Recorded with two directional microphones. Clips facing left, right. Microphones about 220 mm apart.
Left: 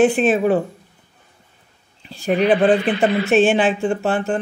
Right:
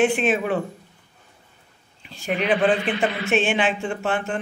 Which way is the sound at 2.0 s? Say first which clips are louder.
Left 7 dB; 35° left (ahead or behind).